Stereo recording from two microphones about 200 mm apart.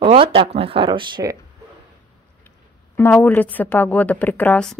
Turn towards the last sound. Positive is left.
turn(degrees=5)  # may be behind; listen again after turning